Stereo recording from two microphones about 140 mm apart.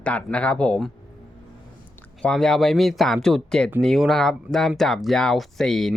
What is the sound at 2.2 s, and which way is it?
Speech, 5° left (ahead or behind).